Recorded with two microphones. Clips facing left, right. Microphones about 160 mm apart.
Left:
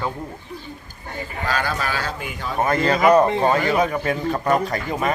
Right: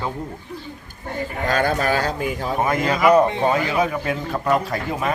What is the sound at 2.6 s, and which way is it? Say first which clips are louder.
Speech: left 1 dB; 10° right (ahead or behind).